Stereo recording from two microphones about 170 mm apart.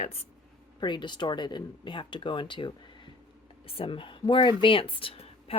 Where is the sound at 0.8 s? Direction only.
25° left (ahead or behind).